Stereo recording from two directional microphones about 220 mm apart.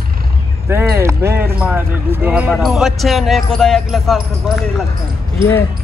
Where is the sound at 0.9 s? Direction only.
10° right (ahead or behind).